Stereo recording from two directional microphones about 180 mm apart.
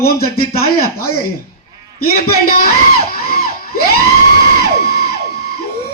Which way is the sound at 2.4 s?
55° left (ahead or behind).